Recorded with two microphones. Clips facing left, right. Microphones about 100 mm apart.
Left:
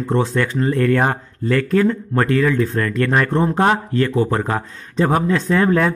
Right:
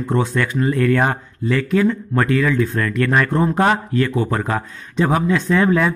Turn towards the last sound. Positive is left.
turn(degrees=45)  # may be behind; listen again after turning